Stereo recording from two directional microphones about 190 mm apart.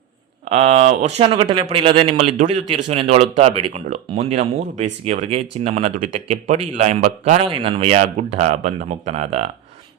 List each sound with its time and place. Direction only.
0.4 s speech: 35° right (ahead or behind)